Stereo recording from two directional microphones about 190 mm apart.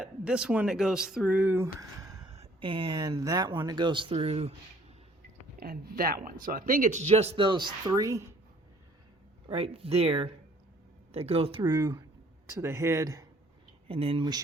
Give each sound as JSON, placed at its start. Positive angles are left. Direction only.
{"t": 0.0, "sound": "speech", "side_deg": -5}
{"t": 2.3, "sound": "speech", "side_deg": -30}
{"t": 5.5, "sound": "speech", "side_deg": -50}
{"t": 9.5, "sound": "speech", "side_deg": -30}
{"t": 13.8, "sound": "speech", "side_deg": -30}